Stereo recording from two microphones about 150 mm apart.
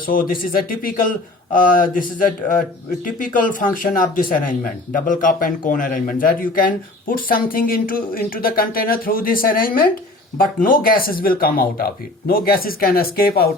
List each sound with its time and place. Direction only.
0.1 s speech: 65° left (ahead or behind); by 13.5 s 90° left